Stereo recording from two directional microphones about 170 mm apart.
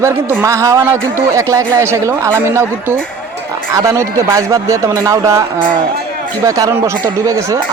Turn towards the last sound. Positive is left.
turn(degrees=-20)  # may be behind; listen again after turning